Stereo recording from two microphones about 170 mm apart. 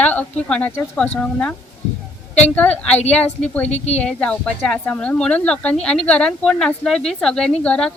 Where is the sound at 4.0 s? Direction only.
5° left (ahead or behind).